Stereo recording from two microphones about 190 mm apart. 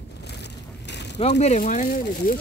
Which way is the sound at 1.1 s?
35° left (ahead or behind).